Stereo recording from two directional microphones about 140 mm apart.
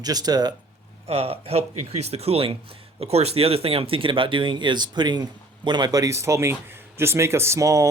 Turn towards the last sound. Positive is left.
turn(degrees=-20)  # may be behind; listen again after turning